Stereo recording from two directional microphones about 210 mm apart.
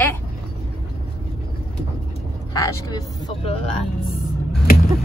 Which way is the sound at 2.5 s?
15° left (ahead or behind).